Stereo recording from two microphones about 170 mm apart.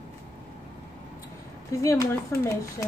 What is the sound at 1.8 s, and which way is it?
Speech, 20° left (ahead or behind).